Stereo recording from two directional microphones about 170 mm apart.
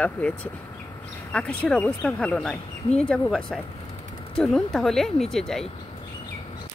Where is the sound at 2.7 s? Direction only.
40° left (ahead or behind).